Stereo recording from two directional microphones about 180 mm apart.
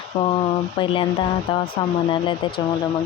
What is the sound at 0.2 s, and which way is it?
Speech, 30° left (ahead or behind).